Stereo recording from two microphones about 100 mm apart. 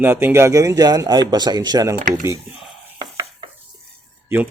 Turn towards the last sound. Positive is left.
turn(degrees=-20)  # may be behind; listen again after turning